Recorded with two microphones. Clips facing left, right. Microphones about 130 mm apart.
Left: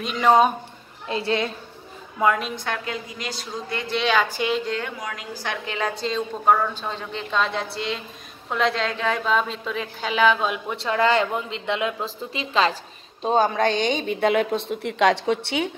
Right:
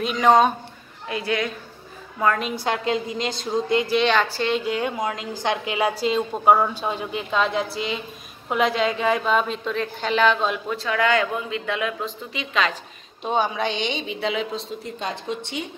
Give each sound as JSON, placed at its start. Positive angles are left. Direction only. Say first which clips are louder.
{"t": 0.0, "sound": "a woman's voice", "louder": "right 1 dB", "side_deg": 0}
{"t": 1.0, "sound": "a woman's voice", "louder": "left 1 dB", "side_deg": 30}
{"t": 2.1, "sound": "a woman's voice", "louder": "left 1 dB", "side_deg": 10}
{"t": 2.6, "sound": "a woman's voice", "louder": "right 6 dB", "side_deg": -20}
{"t": 3.8, "sound": "a woman's voice", "louder": "right 4 dB", "side_deg": 0}
{"t": 4.1, "sound": "speech", "louder": "even", "side_deg": 10}
{"t": 4.6, "sound": "a woman's voice", "louder": "right 3 dB", "side_deg": -15}
{"t": 6.5, "sound": "a woman's voice", "louder": "right 2 dB", "side_deg": -20}
{"t": 10.8, "sound": "a woman's voice", "louder": "left 2 dB", "side_deg": 30}